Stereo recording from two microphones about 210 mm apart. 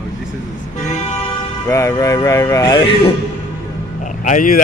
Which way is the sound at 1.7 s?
15° left (ahead or behind).